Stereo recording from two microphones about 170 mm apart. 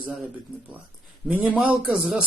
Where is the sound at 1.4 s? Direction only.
10° right (ahead or behind).